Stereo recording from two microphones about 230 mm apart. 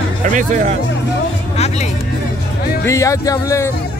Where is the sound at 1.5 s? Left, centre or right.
Left.